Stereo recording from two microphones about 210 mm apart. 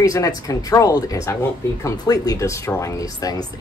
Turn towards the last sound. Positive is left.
turn(degrees=15)  # may be behind; listen again after turning